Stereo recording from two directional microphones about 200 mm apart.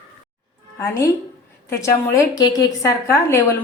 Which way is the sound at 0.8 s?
15° left (ahead or behind).